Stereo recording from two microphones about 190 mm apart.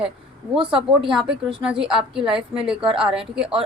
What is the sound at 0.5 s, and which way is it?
Speech, 25° right (ahead or behind).